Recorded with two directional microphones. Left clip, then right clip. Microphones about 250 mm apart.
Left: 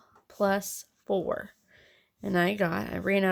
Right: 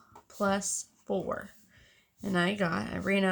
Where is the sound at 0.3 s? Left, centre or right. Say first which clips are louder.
Left 3 dB; left.